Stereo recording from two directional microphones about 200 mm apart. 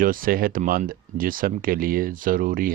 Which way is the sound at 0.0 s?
45° right (ahead or behind).